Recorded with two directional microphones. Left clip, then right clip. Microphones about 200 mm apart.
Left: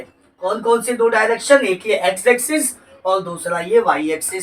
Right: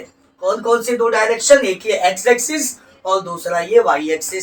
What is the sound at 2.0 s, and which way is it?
Speech, 10° left (ahead or behind).